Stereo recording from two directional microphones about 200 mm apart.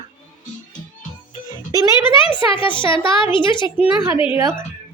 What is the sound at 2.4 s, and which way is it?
A woman's voice, 25° left (ahead or behind).